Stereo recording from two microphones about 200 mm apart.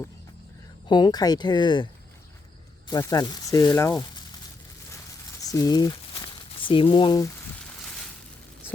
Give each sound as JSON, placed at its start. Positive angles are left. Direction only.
{"t": 0.9, "sound": "speech", "side_deg": 20}
{"t": 2.9, "sound": "speech", "side_deg": 20}
{"t": 5.4, "sound": "speech", "side_deg": 15}